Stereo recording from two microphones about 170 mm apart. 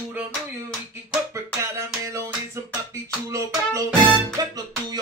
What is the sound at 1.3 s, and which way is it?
Music, 15° right (ahead or behind).